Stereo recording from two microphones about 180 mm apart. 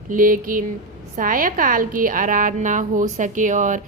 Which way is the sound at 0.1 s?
50° right (ahead or behind).